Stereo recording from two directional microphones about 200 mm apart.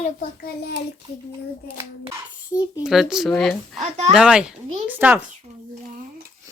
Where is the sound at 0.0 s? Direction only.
45° left (ahead or behind).